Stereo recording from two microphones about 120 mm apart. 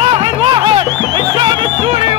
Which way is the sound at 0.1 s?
40° right (ahead or behind).